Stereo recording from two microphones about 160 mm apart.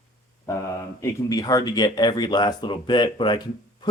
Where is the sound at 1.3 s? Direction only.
25° left (ahead or behind).